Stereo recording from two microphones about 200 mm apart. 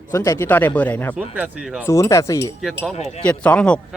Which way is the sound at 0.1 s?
15° left (ahead or behind).